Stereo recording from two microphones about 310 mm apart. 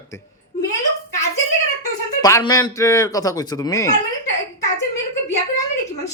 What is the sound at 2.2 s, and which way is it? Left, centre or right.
Speech, centre.